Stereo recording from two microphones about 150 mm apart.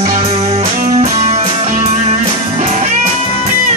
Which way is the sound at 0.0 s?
45° right (ahead or behind).